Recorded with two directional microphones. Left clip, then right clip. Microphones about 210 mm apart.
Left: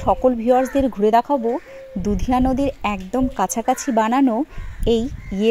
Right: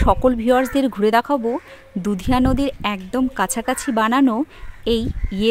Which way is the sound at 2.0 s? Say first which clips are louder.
Even; 50° right (ahead or behind).